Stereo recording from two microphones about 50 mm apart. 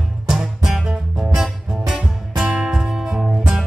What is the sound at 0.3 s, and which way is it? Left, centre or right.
Music, centre.